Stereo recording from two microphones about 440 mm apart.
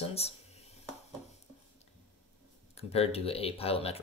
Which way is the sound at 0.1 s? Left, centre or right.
Centre.